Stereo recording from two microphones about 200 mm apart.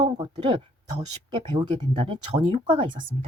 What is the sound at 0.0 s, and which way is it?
Speech, 25° right (ahead or behind).